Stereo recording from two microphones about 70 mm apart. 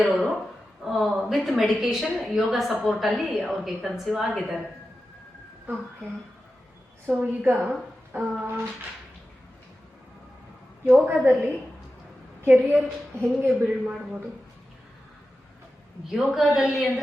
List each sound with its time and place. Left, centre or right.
0.0 s a woman's voice: centre
7.1 s a woman's voice: right
11.0 s a woman's voice: right
16.1 s a woman's voice: centre